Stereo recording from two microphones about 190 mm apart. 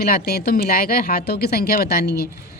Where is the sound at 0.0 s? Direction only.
55° left (ahead or behind).